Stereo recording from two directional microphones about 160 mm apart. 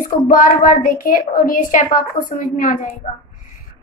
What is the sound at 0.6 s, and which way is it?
A woman's voice, 60° left (ahead or behind).